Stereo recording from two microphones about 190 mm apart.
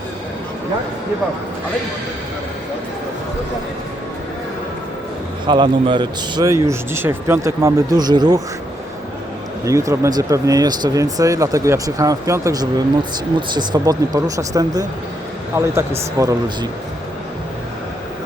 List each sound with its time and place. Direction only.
5.5 s speech: 25° right (ahead or behind)
9.6 s speech: 15° right (ahead or behind)